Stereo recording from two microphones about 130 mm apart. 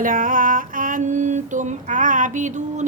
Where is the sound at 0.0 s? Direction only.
90° right.